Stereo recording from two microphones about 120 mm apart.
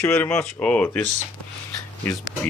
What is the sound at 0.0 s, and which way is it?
Speech, 20° left (ahead or behind).